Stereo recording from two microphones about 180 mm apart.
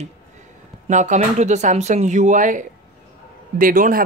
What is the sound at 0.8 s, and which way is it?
Speech, 40° right (ahead or behind).